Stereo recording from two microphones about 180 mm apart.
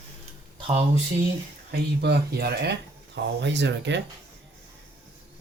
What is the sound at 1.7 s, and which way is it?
Speech, 65° right (ahead or behind).